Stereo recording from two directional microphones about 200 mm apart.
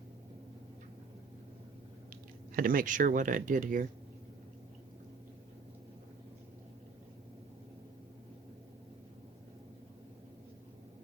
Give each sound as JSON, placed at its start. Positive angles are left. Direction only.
{"t": 2.5, "sound": "speech", "side_deg": -45}